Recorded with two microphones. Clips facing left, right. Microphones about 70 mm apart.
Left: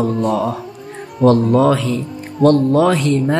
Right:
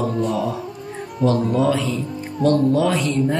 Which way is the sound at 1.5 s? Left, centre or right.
Left.